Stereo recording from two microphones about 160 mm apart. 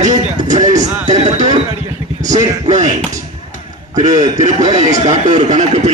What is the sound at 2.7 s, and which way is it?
Speech, 50° right (ahead or behind).